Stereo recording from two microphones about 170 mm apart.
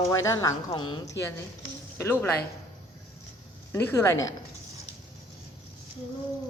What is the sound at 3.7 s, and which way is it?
Speech, 15° left (ahead or behind).